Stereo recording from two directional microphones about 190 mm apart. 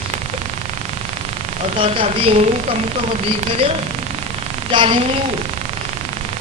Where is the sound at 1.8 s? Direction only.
30° right (ahead or behind).